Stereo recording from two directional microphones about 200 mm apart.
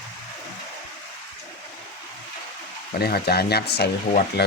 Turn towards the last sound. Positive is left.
turn(degrees=55)  # may be behind; listen again after turning